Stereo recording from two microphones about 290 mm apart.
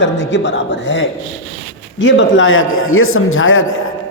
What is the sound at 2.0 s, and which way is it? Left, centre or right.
A man's voice, left.